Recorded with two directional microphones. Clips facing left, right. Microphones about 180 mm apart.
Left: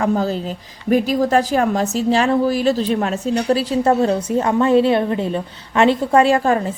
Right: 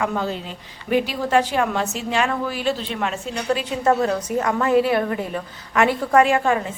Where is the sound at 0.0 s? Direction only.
40° left (ahead or behind).